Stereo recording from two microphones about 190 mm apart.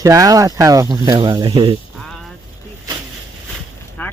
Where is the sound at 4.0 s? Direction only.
10° left (ahead or behind).